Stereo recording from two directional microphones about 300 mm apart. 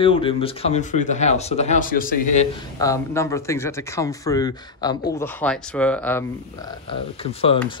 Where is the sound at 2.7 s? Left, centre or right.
Centre.